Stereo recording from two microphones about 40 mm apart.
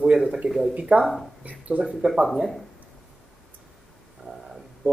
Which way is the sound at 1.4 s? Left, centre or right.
Right.